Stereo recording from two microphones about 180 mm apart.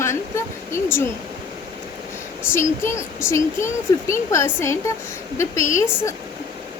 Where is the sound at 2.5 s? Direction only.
15° left (ahead or behind).